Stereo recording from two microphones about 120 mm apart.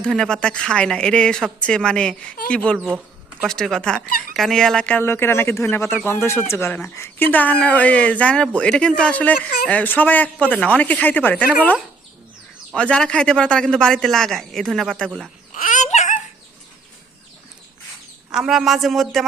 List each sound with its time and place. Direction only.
0.0 s speech: 5° left (ahead or behind)
15.7 s babbling: 80° left
18.3 s a man's voice: 5° right (ahead or behind)